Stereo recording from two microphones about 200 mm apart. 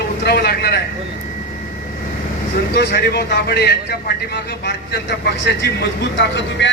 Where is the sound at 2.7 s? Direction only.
55° left (ahead or behind).